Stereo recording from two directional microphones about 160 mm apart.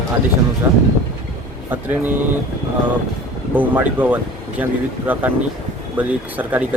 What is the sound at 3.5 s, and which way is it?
Speech, 10° right (ahead or behind).